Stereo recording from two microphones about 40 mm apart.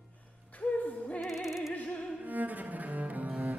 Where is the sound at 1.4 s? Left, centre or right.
Centre.